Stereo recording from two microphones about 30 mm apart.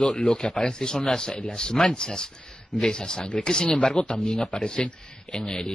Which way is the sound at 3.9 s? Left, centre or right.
Left.